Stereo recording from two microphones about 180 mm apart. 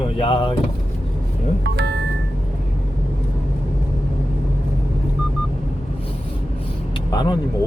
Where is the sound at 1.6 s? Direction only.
65° right (ahead or behind).